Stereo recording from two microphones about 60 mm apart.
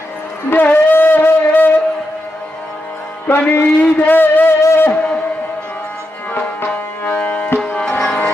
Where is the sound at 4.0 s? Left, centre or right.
Left.